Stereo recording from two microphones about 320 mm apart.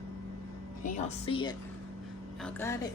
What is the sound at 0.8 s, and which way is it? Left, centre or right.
A woman's voice, left.